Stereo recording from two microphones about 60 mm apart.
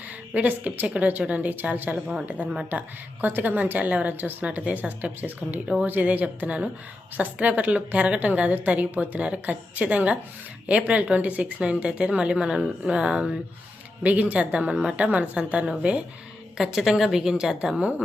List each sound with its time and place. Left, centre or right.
0.3 s a woman's voice: right
14.0 s a woman's voice: right
16.6 s a woman's voice: centre